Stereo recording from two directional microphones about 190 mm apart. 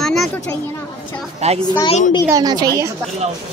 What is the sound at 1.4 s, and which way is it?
Speech, 35° right (ahead or behind).